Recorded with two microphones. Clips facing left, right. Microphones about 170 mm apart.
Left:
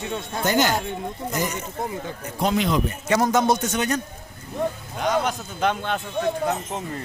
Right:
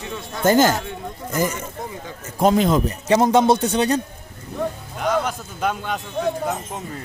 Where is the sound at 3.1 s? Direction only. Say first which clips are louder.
Right 5 dB; 25° right (ahead or behind).